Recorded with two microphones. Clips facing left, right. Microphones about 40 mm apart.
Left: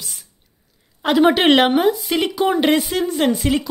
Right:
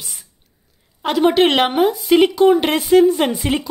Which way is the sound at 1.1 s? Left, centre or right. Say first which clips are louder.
Left 1 dB; centre.